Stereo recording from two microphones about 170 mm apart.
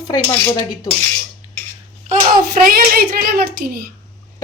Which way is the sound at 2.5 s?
60° right (ahead or behind).